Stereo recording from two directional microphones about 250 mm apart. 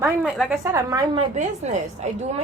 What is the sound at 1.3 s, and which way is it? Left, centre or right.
Speech, right.